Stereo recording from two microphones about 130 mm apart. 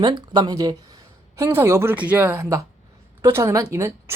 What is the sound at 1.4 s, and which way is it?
Speech, 20° right (ahead or behind).